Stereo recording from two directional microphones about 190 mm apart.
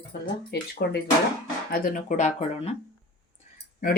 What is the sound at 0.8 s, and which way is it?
Speech, 55° left (ahead or behind).